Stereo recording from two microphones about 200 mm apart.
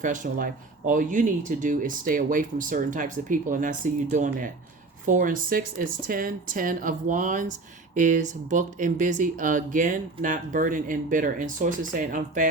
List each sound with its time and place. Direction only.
0.0 s speech: 40° right (ahead or behind)